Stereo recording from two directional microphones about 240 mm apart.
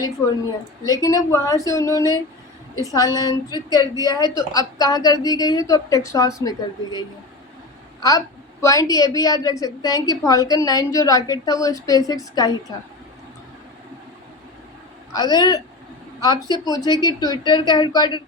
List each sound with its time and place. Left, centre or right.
0.9 s a woman's voice: centre
8.6 s a woman's voice: centre
15.1 s a woman's voice: centre